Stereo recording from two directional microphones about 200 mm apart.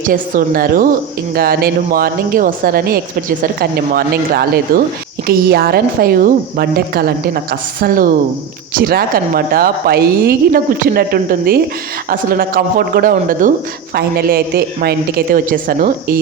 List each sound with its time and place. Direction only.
0.0 s a woman's voice: 45° right (ahead or behind)